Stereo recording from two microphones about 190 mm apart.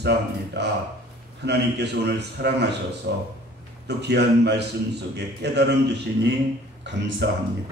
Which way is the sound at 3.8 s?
60° right (ahead or behind).